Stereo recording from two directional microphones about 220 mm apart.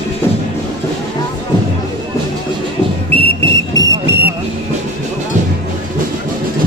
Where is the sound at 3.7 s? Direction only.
15° right (ahead or behind).